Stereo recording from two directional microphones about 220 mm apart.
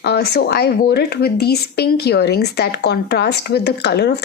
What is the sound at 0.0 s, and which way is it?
Speech, 45° left (ahead or behind).